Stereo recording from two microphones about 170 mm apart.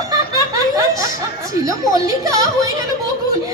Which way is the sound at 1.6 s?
20° right (ahead or behind).